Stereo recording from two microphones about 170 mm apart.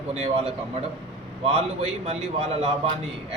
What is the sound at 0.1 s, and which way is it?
Speech, 40° right (ahead or behind).